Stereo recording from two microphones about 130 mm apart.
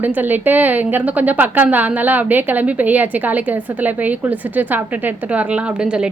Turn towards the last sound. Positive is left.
turn(degrees=-5)  # may be behind; listen again after turning